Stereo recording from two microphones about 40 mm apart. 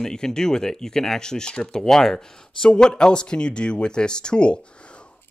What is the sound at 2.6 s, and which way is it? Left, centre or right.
Speech, left.